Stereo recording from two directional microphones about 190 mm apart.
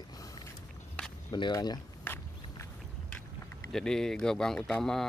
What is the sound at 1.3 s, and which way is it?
Speech, 20° left (ahead or behind).